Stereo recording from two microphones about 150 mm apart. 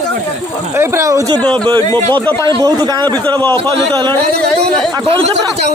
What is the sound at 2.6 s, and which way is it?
Speech, 25° right (ahead or behind).